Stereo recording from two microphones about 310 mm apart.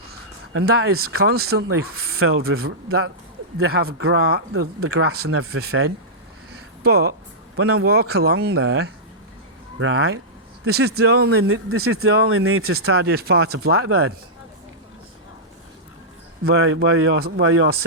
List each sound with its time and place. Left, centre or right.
0.1 s a sound: right
1.3 s speech: right
5.5 s speech: right
7.5 s a man's voice: right
7.9 s speech: right
10.7 s speech: right
11.3 s speech: right
12.6 s speech: right
16.4 s speech: right